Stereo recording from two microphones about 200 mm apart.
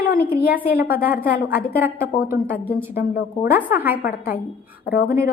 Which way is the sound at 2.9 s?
50° left (ahead or behind).